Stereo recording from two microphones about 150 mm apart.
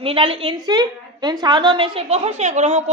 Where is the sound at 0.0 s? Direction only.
40° right (ahead or behind).